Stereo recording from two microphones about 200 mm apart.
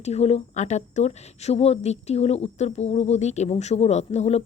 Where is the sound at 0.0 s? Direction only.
30° left (ahead or behind).